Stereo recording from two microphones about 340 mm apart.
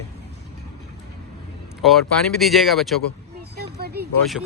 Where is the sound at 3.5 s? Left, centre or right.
Right.